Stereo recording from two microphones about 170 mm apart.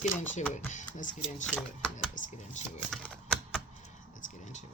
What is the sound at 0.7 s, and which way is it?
Speech, 50° left (ahead or behind).